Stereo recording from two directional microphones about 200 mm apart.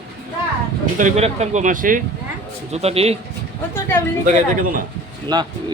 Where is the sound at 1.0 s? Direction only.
35° right (ahead or behind).